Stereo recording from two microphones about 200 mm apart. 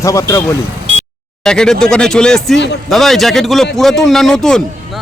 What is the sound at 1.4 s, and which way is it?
A man's voice, 5° left (ahead or behind).